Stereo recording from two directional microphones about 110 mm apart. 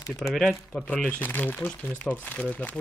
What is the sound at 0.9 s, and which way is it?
Speech, 15° left (ahead or behind).